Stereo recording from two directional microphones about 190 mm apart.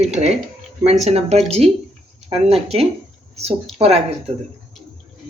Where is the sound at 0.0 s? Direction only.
35° right (ahead or behind).